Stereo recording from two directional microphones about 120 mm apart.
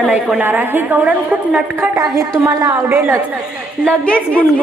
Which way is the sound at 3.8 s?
5° left (ahead or behind).